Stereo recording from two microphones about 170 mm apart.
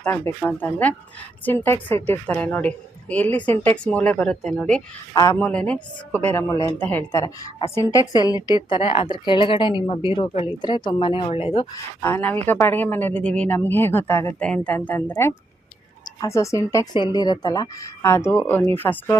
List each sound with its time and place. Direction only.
0.0 s speech: 10° left (ahead or behind)
5.1 s a woman's voice: 20° left (ahead or behind)
5.4 s a woman's voice: 5° left (ahead or behind); by 11.7 s 30° left (ahead or behind)
12.0 s speech: 10° left (ahead or behind)